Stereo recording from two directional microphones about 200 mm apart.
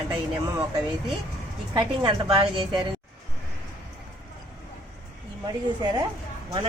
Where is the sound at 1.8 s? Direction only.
25° right (ahead or behind).